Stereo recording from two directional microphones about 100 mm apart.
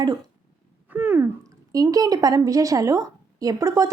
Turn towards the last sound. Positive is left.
turn(degrees=-35)  # may be behind; listen again after turning